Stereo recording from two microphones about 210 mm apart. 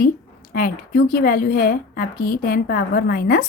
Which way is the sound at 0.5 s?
45° left (ahead or behind).